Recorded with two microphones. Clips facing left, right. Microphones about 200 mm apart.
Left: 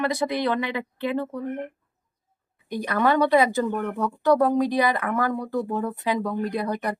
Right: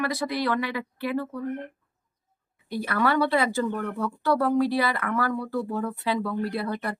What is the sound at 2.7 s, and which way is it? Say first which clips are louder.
Speech: left 3 dB; 20° left (ahead or behind).